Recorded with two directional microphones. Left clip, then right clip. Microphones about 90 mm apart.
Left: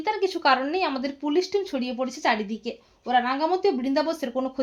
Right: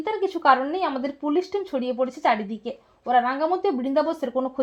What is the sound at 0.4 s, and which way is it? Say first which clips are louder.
Speech: right 3 dB; 35° right (ahead or behind).